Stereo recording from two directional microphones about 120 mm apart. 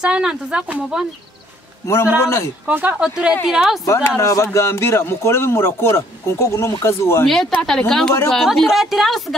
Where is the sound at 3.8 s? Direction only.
25° left (ahead or behind).